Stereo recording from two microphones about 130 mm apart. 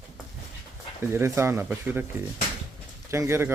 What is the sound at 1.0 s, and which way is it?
Speech, 20° right (ahead or behind).